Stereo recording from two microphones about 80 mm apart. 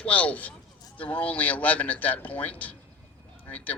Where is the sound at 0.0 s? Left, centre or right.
Centre.